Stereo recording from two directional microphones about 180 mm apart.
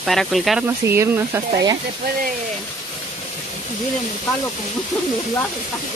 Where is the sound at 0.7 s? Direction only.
15° right (ahead or behind).